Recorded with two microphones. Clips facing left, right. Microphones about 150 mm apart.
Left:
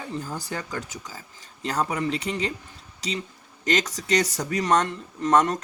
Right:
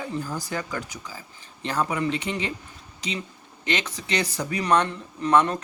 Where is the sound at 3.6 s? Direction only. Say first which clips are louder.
Left 3 dB; 40° left (ahead or behind).